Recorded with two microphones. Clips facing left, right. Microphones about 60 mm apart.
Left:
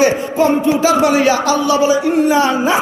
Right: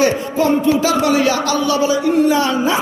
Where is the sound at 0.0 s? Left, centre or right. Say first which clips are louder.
Left 2 dB; left.